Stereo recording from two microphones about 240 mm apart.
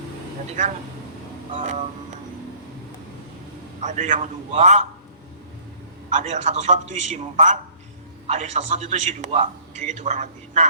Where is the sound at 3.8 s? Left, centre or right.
Right.